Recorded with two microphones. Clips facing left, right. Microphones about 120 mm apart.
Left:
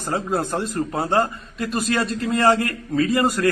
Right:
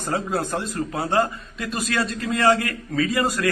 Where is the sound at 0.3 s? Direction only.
50° left (ahead or behind).